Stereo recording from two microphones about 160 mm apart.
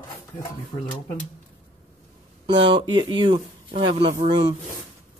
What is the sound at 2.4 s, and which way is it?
Speech, 30° right (ahead or behind).